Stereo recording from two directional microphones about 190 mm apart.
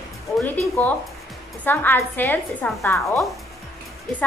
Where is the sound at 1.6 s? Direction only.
10° left (ahead or behind).